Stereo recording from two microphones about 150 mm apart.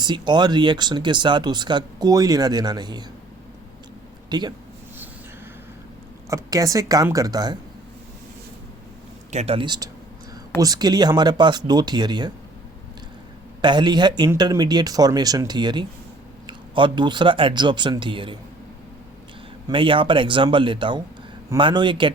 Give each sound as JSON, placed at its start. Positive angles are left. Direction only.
{"t": 0.0, "sound": "speech", "side_deg": -30}
{"t": 4.3, "sound": "speech", "side_deg": -30}
{"t": 6.3, "sound": "speech", "side_deg": -20}
{"t": 9.3, "sound": "speech", "side_deg": -45}
{"t": 13.6, "sound": "speech", "side_deg": -30}
{"t": 19.6, "sound": "speech", "side_deg": -35}